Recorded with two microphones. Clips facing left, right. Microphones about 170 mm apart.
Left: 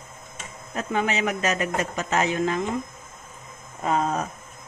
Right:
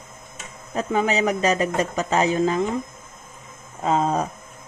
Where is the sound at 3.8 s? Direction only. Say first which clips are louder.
Right 3 dB; 25° right (ahead or behind).